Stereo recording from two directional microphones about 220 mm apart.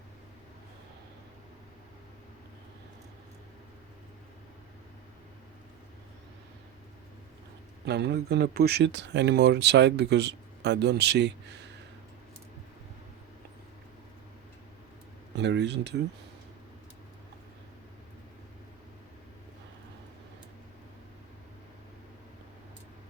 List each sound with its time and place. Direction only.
7.9 s speech: 50° right (ahead or behind)
15.4 s speech: 50° right (ahead or behind)